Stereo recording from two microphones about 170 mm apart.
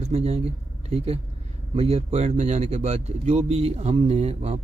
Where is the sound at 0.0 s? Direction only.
40° right (ahead or behind).